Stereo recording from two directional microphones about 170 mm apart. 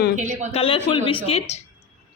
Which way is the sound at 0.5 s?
35° left (ahead or behind).